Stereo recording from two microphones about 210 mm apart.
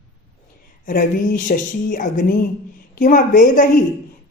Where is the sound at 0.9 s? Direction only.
40° left (ahead or behind).